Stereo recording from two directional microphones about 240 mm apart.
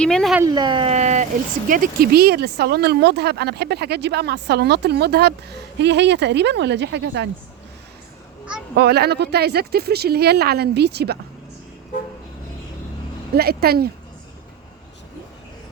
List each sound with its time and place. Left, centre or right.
0.0 s speech: centre
0.4 s speech: centre; by 7.3 s right
8.7 s speech: right
13.3 s speech: right